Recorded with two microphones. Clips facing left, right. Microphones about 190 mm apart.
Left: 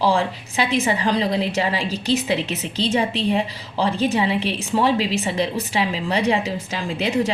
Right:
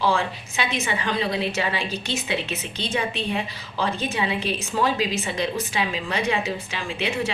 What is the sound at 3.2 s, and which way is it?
A woman's voice, 30° left (ahead or behind).